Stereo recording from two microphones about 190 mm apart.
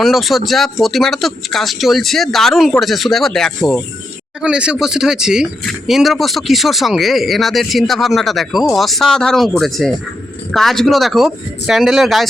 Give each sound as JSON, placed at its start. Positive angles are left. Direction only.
{"t": 0.0, "sound": "speech", "side_deg": 0}